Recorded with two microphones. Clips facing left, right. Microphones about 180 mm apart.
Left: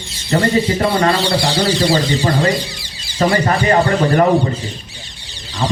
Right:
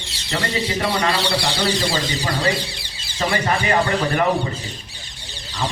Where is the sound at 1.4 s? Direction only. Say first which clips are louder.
Left 6 dB; 55° left (ahead or behind).